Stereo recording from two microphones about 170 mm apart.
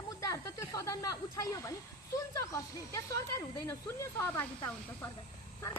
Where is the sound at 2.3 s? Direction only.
20° left (ahead or behind).